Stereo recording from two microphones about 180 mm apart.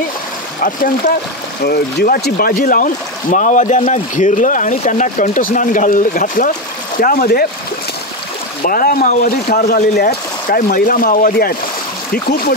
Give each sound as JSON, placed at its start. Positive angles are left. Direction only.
{"t": 0.6, "sound": "speech", "side_deg": 50}
{"t": 8.6, "sound": "speech", "side_deg": 50}